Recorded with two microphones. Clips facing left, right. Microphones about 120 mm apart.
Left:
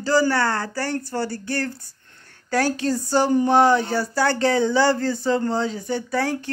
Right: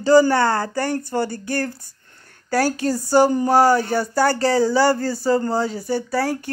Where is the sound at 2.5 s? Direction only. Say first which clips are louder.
Right 2 dB; 10° right (ahead or behind).